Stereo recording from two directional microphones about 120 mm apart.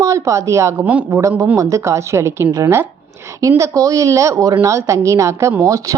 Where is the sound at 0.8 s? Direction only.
10° right (ahead or behind).